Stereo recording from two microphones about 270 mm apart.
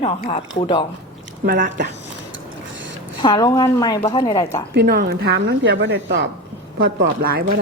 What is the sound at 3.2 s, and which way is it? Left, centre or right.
A woman's voice, centre.